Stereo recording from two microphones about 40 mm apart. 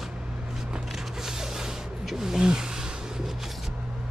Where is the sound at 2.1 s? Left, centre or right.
Centre.